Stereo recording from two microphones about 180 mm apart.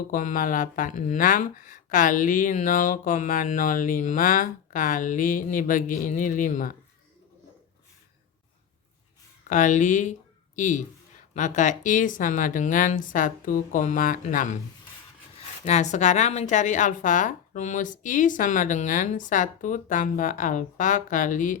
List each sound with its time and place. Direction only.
0.1 s speech: 50° left (ahead or behind)
9.5 s speech: 45° left (ahead or behind)
15.6 s speech: 40° left (ahead or behind)